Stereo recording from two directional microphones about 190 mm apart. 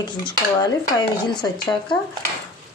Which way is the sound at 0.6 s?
20° left (ahead or behind).